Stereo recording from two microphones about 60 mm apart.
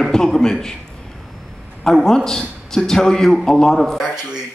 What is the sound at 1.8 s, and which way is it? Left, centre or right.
A man's voice, centre.